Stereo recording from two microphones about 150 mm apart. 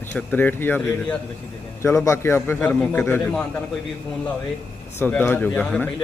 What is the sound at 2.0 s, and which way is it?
Speech, 15° left (ahead or behind).